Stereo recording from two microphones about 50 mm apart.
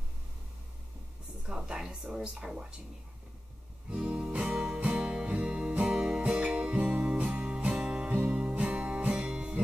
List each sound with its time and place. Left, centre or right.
1.5 s a sound: centre
2.1 s speech: centre
3.9 s music: right